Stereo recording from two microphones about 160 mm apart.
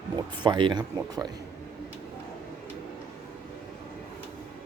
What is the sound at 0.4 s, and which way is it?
Speech, 30° right (ahead or behind).